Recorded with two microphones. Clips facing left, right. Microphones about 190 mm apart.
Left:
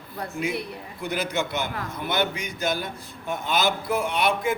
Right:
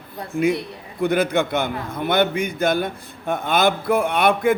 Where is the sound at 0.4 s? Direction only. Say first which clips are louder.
Right 9 dB; 60° right (ahead or behind).